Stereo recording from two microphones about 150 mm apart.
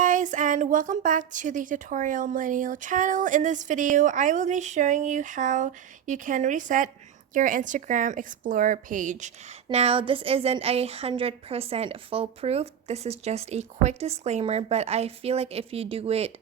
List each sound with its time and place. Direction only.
0.0 s a woman's voice: 55° right (ahead or behind)
9.7 s a woman's voice: 40° right (ahead or behind)